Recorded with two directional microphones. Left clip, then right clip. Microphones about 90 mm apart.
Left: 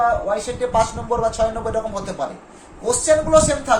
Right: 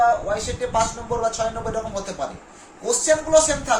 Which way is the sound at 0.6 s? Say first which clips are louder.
Left 4 dB; 40° left (ahead or behind).